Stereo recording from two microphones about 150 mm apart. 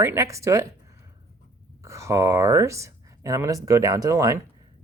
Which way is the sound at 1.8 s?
20° right (ahead or behind).